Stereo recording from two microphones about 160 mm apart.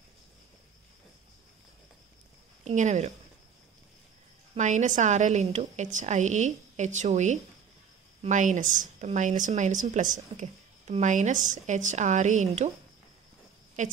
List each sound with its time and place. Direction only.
2.6 s a woman's voice: 45° right (ahead or behind)
4.6 s a woman's voice: 50° right (ahead or behind)